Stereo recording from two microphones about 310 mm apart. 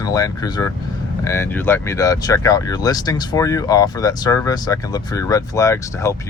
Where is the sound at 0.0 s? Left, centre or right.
Centre.